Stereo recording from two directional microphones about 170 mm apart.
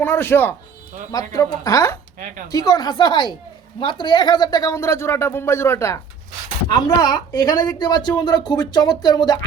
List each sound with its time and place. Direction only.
0.0 s a woman's voice: 15° left (ahead or behind)
2.1 s a sound: 50° right (ahead or behind)
2.5 s a woman's voice: 20° left (ahead or behind)